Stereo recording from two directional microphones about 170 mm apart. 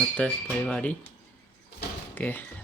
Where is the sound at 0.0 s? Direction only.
5° left (ahead or behind).